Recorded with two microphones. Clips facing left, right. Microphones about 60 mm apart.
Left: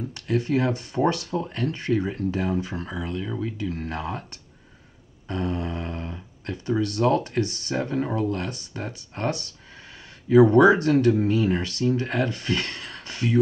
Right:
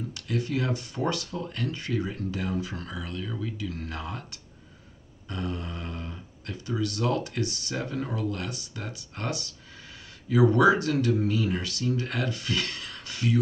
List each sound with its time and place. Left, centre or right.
0.1 s speech: left
5.3 s speech: left